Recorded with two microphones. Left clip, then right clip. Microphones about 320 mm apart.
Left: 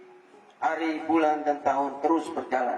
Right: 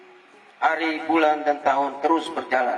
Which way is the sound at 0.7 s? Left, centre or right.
Centre.